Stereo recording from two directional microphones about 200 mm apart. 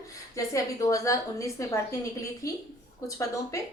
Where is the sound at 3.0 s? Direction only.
15° left (ahead or behind).